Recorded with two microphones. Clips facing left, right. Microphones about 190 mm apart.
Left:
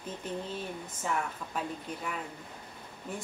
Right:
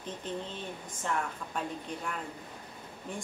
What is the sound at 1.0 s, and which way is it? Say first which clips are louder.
A woman's voice: even; 5° left (ahead or behind).